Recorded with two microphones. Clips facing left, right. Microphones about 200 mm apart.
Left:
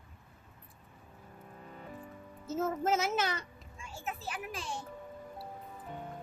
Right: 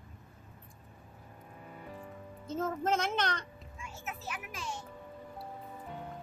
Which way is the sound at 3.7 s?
30° left (ahead or behind).